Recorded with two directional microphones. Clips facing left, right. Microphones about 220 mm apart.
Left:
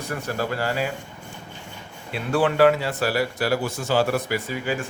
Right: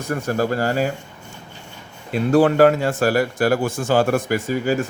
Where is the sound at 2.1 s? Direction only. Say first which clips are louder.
Right 7 dB; 40° right (ahead or behind).